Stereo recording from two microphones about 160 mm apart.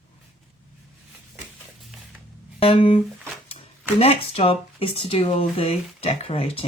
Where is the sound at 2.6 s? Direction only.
35° left (ahead or behind).